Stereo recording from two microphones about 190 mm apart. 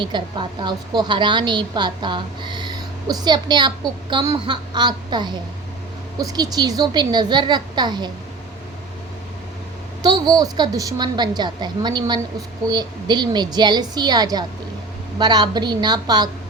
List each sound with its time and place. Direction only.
0.0 s a woman's voice: 25° right (ahead or behind)
10.0 s a woman's voice: 20° right (ahead or behind)